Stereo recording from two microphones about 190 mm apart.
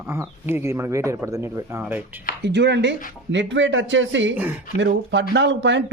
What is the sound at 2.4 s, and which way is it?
Speech, 65° right (ahead or behind).